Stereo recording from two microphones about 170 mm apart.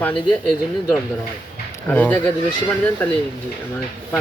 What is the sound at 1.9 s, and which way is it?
Speech, 10° left (ahead or behind).